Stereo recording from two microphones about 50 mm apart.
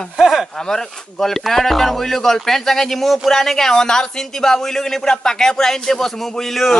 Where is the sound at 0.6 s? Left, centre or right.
Centre.